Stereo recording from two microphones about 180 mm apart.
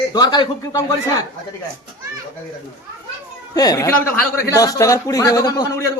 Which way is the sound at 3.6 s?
20° left (ahead or behind).